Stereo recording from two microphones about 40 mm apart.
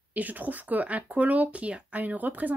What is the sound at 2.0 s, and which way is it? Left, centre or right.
Speech, right.